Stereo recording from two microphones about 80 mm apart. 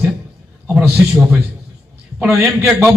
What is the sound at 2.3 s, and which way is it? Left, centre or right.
Speech, right.